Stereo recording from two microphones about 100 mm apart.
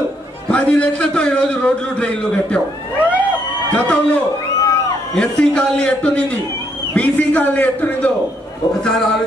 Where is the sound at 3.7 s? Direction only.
15° left (ahead or behind).